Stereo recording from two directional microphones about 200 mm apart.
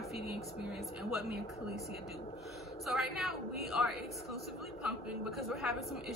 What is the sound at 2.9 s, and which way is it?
A woman's voice, centre (ahead or behind).